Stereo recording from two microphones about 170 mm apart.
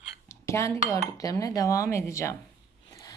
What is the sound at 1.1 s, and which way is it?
Speech, 20° left (ahead or behind).